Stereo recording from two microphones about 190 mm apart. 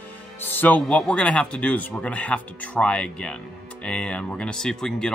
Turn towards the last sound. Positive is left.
turn(degrees=5)  # may be behind; listen again after turning